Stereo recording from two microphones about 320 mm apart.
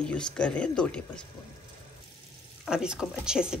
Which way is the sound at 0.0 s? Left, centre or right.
Centre.